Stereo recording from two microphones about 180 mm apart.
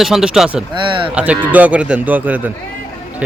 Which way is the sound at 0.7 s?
25° right (ahead or behind).